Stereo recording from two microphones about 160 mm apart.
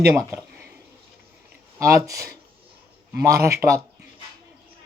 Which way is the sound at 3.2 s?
20° right (ahead or behind).